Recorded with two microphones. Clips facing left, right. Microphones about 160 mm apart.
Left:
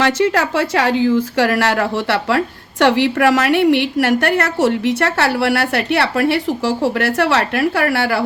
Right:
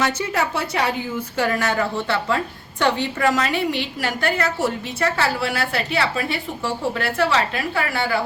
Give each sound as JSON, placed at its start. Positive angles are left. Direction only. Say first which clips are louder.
{"t": 0.0, "sound": "a woman's voice", "louder": "left 7 dB", "side_deg": 90}